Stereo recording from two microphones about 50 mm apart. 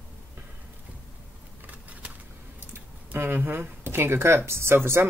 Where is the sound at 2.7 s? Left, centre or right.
Right.